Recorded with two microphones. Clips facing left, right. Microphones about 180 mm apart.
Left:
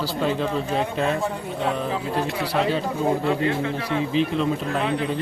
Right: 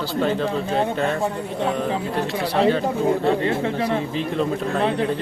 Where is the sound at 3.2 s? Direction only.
30° right (ahead or behind).